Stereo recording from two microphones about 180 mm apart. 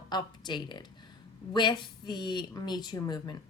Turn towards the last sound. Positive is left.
turn(degrees=20)  # may be behind; listen again after turning